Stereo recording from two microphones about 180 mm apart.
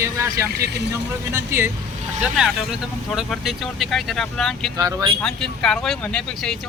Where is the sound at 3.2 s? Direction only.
Centre (ahead or behind).